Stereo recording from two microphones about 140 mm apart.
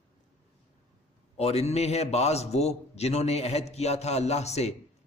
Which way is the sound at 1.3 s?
50° left (ahead or behind).